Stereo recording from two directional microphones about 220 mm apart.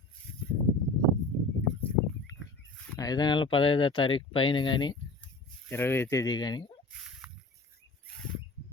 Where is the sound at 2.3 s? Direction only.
15° left (ahead or behind).